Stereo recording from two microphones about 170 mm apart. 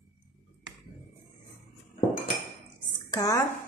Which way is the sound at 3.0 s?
20° left (ahead or behind).